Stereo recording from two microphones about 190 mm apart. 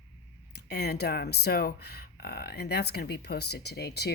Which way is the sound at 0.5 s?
60° left (ahead or behind).